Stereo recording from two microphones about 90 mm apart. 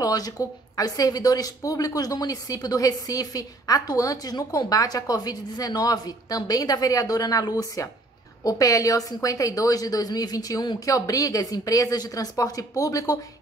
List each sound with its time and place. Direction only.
0.0 s a woman's voice: 45° left (ahead or behind)